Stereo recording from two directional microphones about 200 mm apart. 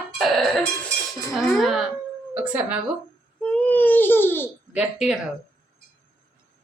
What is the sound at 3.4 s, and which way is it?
Baby cry, 5° left (ahead or behind).